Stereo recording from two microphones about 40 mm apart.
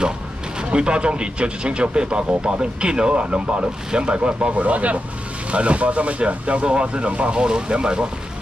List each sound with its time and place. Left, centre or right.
0.6 s speech: right